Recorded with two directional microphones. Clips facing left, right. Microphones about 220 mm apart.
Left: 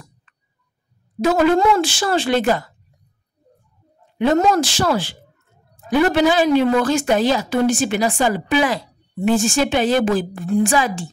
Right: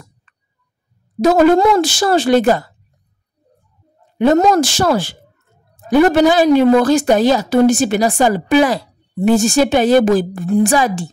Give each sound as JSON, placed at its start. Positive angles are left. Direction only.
{"t": 1.2, "sound": "a woman's voice", "side_deg": -40}
{"t": 4.2, "sound": "a woman's voice", "side_deg": -45}